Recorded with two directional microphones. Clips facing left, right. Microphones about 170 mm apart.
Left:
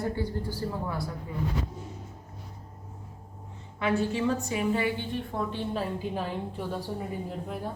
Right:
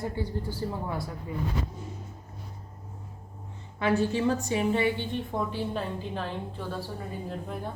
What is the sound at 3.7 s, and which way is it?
A woman's voice, 35° right (ahead or behind).